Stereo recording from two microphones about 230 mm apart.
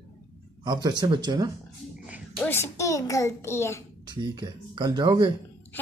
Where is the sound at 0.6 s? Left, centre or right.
Centre.